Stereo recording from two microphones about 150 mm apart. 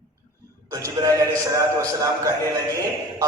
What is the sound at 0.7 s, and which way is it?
A man's voice, 20° right (ahead or behind).